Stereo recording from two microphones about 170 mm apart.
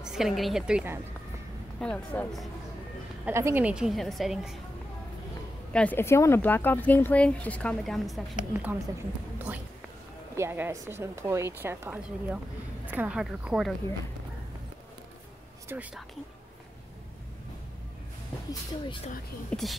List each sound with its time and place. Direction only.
0.0 s a woman's voice: 5° right (ahead or behind)
1.8 s a woman's voice: 5° left (ahead or behind)
3.3 s a woman's voice: 15° right (ahead or behind)
5.7 s speech: 10° left (ahead or behind)
8.5 s a woman's voice: 10° right (ahead or behind)
10.3 s a woman's voice: 15° right (ahead or behind)
15.7 s a woman's voice: 10° right (ahead or behind)
18.5 s speech: 25° left (ahead or behind)
19.5 s speech: 5° left (ahead or behind)